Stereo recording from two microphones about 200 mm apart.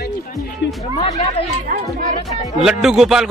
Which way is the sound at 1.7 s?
45° right (ahead or behind).